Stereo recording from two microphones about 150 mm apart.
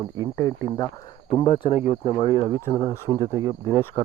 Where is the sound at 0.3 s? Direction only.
25° left (ahead or behind).